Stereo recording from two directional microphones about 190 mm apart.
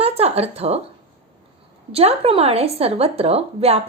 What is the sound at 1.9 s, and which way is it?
Speech, 30° right (ahead or behind).